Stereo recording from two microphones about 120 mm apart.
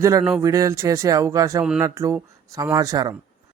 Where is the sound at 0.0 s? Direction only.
25° right (ahead or behind).